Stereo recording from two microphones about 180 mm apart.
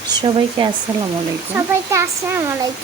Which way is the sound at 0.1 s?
25° right (ahead or behind).